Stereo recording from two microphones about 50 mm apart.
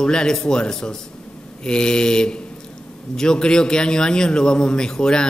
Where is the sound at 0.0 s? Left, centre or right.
Centre.